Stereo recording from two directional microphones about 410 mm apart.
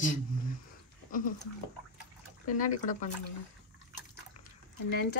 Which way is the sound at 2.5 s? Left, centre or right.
Centre.